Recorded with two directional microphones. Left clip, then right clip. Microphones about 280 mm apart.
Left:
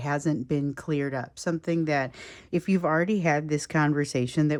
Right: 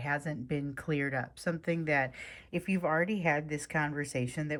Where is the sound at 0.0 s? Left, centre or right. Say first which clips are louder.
Left 6 dB; centre.